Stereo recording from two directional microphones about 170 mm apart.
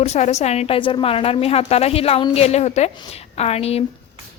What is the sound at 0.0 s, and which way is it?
A woman's voice, 40° left (ahead or behind).